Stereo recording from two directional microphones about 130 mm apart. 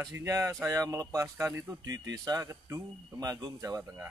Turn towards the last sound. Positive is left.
turn(degrees=-30)  # may be behind; listen again after turning